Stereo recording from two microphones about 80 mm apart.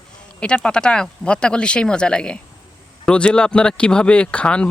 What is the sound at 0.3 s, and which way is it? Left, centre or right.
Speech, centre.